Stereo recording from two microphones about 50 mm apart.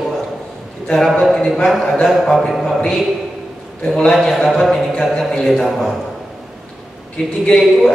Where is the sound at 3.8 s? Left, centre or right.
Centre.